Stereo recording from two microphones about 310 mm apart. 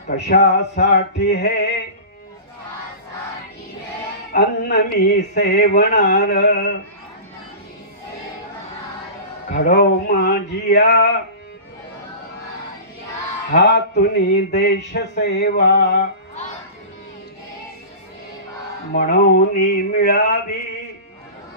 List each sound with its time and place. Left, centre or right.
0.1 s mantra: left
4.3 s mantra: left
9.5 s mantra: left
13.5 s mantra: left
18.9 s mantra: left